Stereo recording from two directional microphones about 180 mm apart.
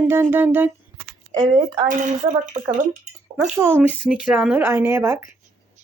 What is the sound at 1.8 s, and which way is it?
Speech, 45° right (ahead or behind).